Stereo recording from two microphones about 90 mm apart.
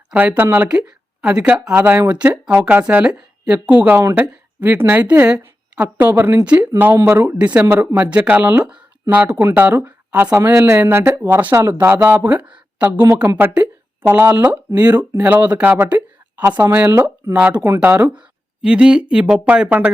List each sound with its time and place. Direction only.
0.1 s speech: 15° right (ahead or behind)
6.7 s speech: 25° right (ahead or behind)
7.3 s speech: 15° right (ahead or behind)
10.3 s speech: 30° right (ahead or behind)
11.1 s speech: 40° right (ahead or behind)
17.3 s speech: 15° right (ahead or behind)